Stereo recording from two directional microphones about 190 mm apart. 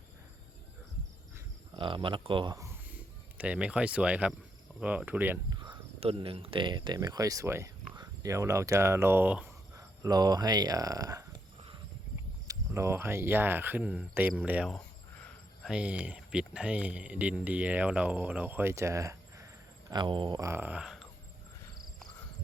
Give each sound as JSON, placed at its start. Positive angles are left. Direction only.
{"t": 1.7, "sound": "speech", "side_deg": -25}
{"t": 3.3, "sound": "speech", "side_deg": -5}
{"t": 5.5, "sound": "speech", "side_deg": -25}
{"t": 10.0, "sound": "speech", "side_deg": -20}
{"t": 14.7, "sound": "speech", "side_deg": 5}